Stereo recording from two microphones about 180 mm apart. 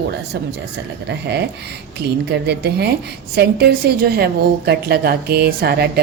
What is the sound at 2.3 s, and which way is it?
A woman's voice, 65° right (ahead or behind).